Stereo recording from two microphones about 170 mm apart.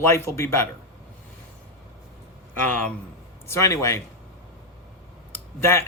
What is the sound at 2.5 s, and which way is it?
A man's voice, 10° left (ahead or behind).